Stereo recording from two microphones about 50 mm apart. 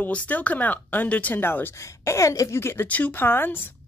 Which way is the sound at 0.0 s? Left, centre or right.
Left.